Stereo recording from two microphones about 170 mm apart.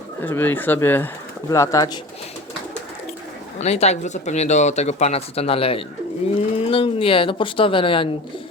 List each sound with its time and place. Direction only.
0.2 s speech: 10° left (ahead or behind)
3.6 s speech: 40° left (ahead or behind)